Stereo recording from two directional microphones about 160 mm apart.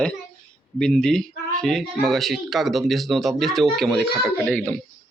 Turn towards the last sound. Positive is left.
turn(degrees=5)  # may be behind; listen again after turning